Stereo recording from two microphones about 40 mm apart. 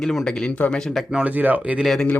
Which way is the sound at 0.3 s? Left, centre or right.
Left.